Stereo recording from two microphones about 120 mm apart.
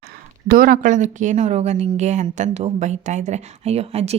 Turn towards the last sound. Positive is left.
turn(degrees=-60)  # may be behind; listen again after turning